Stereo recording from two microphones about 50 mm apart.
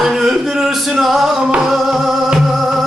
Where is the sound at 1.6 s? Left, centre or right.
Centre.